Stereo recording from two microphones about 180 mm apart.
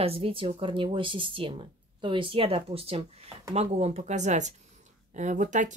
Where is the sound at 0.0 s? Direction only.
30° right (ahead or behind).